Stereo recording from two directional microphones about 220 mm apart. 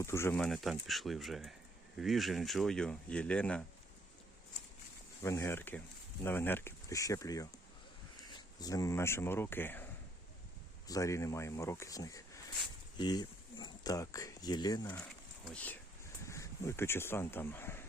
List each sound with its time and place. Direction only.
0.0 s speech: 10° left (ahead or behind)
5.2 s speech: 10° left (ahead or behind)
15.4 s speech: 5° left (ahead or behind)